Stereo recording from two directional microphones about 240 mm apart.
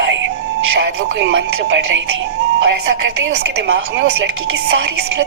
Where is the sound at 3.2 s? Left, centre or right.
Right.